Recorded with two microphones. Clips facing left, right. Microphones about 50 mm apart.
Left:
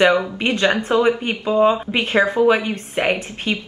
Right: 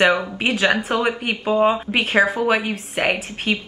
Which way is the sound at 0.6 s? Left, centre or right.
Right.